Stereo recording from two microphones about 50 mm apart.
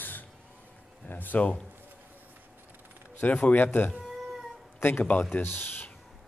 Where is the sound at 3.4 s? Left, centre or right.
Left.